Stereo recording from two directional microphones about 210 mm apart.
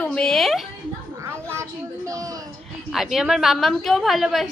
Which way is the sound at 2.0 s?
15° right (ahead or behind).